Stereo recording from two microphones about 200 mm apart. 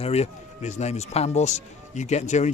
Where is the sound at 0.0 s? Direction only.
30° left (ahead or behind).